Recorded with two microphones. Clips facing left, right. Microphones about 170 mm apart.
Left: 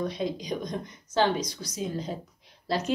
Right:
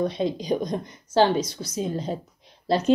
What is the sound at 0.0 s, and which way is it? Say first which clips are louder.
A woman's voice: right 5 dB; 30° right (ahead or behind).